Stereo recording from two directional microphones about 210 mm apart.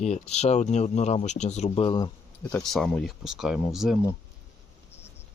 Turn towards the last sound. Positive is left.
turn(degrees=0)  # may be behind; listen again after turning